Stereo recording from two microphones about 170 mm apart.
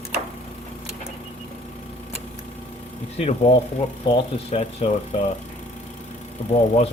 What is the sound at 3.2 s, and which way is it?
Speech, 35° left (ahead or behind).